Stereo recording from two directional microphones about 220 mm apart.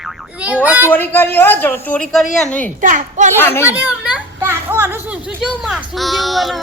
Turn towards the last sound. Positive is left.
turn(degrees=0)  # may be behind; listen again after turning